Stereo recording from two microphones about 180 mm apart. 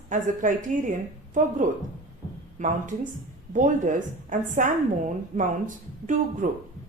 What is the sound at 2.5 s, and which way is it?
A woman's voice, 45° right (ahead or behind).